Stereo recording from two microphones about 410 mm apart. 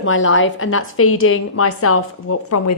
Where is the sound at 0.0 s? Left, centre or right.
Left.